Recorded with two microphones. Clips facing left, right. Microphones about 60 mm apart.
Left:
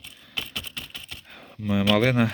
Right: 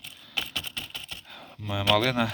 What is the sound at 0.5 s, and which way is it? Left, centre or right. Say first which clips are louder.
Typing: even; centre.